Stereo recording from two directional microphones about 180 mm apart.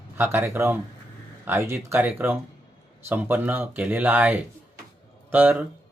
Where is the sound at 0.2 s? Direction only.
15° right (ahead or behind).